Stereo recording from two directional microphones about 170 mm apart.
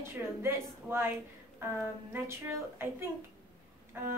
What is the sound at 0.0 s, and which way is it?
Speech, 15° right (ahead or behind).